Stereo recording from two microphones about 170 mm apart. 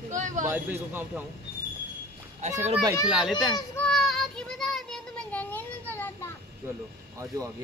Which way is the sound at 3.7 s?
5° left (ahead or behind).